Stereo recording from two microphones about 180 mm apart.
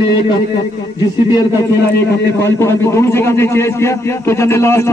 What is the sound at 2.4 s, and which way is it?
A man's voice, 15° left (ahead or behind).